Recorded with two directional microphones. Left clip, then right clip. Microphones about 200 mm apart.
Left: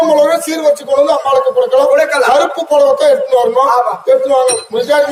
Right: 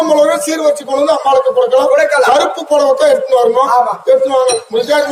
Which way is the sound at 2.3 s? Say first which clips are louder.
Left 1 dB; 15° right (ahead or behind).